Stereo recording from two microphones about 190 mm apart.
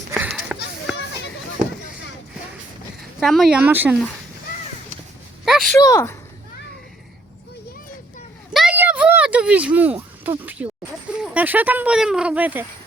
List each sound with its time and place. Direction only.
0.1 s run: 5° right (ahead or behind)
3.0 s a woman's voice: centre (ahead or behind)
5.5 s a sound: centre (ahead or behind)
5.8 s speech: 15° left (ahead or behind)
8.5 s a sound: 5° right (ahead or behind)
11.2 s speech: 10° right (ahead or behind)